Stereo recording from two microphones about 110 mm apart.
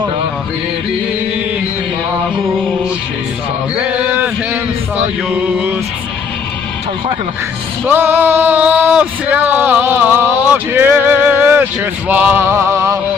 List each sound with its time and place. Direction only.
3.8 s a sound: 10° right (ahead or behind)
5.3 s speech: 15° right (ahead or behind)
7.8 s speech: 20° right (ahead or behind)